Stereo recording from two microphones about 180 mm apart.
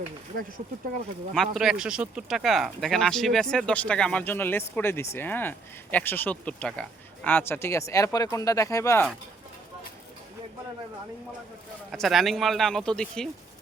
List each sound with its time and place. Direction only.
1.3 s speech: centre (ahead or behind); by 9.0 s 15° left (ahead or behind)
11.9 s speech: centre (ahead or behind)